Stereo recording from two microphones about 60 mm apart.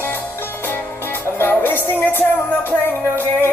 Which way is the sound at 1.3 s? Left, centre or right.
Left.